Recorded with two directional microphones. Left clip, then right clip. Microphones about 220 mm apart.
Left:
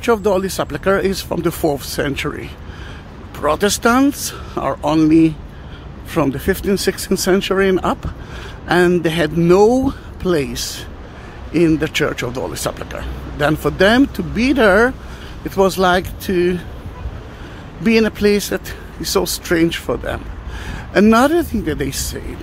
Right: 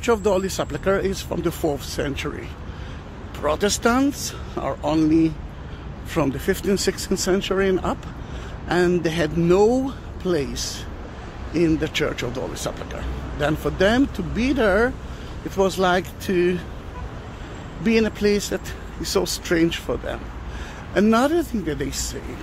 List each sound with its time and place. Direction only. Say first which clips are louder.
0.0 s speech: left 4 dB; 15° left (ahead or behind)
17.8 s speech: left 5 dB; 20° left (ahead or behind)